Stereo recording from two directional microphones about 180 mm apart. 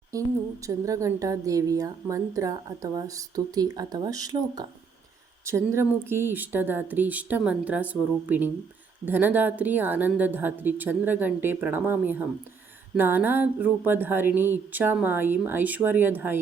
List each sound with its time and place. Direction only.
0.1 s a woman's voice: 20° right (ahead or behind)